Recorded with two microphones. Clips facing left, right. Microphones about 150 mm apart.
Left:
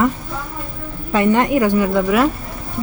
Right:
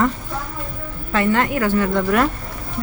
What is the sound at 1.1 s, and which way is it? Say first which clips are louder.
A woman's voice: left 4 dB; 15° left (ahead or behind).